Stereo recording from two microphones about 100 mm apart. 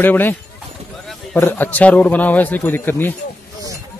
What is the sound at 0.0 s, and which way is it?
A man's voice, 20° left (ahead or behind).